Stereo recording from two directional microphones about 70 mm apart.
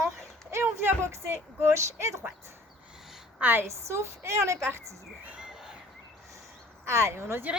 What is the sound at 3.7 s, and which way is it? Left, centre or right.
Speech, right.